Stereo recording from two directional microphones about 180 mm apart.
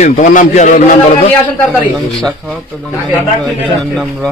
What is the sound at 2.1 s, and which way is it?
A man's voice, 5° left (ahead or behind).